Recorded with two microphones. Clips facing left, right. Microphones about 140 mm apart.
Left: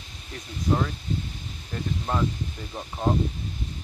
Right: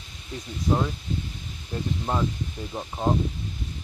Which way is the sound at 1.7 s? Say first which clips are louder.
Right 1 dB; 15° right (ahead or behind).